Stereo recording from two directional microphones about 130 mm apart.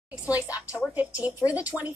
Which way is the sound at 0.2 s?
15° right (ahead or behind).